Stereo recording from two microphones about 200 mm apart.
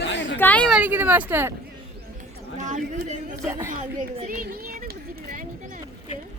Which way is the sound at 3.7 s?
40° right (ahead or behind).